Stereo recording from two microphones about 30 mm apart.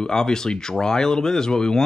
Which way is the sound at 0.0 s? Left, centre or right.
Left.